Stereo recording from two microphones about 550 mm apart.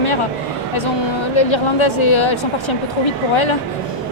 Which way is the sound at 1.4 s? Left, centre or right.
Left.